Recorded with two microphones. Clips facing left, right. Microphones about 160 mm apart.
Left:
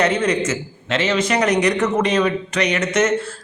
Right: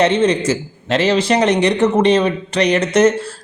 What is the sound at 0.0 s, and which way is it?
A man's voice, 30° right (ahead or behind).